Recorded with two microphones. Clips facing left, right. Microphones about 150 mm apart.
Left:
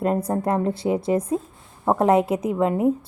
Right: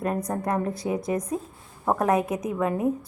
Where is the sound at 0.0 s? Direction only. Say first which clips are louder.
Left 5 dB; 25° left (ahead or behind).